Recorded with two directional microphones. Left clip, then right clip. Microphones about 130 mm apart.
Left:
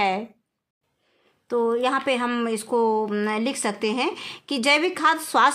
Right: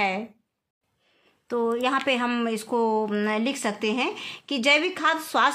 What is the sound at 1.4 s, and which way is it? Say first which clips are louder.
Speech: left 3 dB; 20° left (ahead or behind).